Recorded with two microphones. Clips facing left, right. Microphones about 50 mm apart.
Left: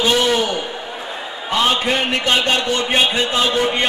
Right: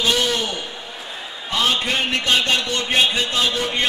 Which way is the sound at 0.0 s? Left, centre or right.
Centre.